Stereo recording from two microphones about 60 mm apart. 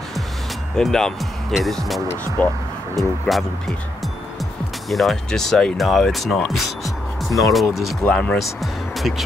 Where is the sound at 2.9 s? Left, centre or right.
Centre.